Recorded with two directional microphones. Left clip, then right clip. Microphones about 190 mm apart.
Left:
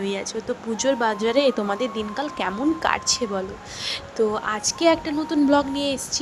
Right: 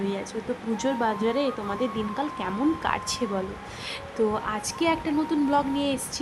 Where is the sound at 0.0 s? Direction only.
30° left (ahead or behind).